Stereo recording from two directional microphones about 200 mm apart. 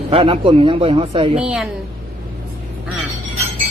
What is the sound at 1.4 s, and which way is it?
Speech, 5° right (ahead or behind).